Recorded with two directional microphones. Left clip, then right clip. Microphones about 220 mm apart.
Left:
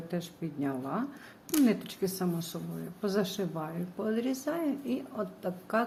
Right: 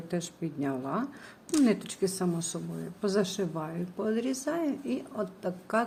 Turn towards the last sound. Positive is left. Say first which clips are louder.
# right 1 dB
turn(degrees=-10)  # may be behind; listen again after turning